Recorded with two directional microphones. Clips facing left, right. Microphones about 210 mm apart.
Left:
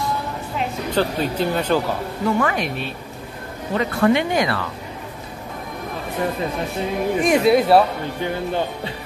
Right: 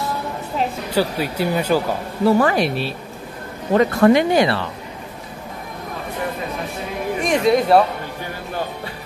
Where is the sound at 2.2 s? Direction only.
35° right (ahead or behind).